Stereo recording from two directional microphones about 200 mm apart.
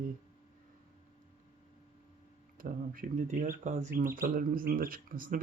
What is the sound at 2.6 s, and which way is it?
Speech, 45° right (ahead or behind).